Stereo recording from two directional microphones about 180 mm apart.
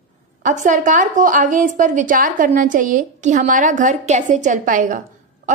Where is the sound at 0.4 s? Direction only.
45° right (ahead or behind).